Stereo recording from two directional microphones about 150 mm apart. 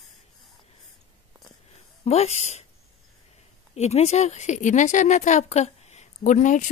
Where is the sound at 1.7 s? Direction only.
45° left (ahead or behind).